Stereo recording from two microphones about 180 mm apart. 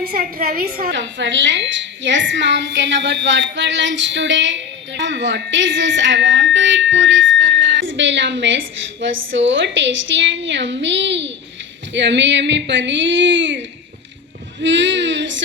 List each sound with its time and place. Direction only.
0.1 s a woman's voice: 55° right (ahead or behind)
0.9 s a woman's voice: 85° right